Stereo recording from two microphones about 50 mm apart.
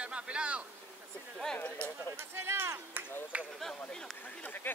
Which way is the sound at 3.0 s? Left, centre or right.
Right.